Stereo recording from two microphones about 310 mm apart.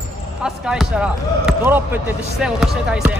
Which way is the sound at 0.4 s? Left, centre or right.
Centre.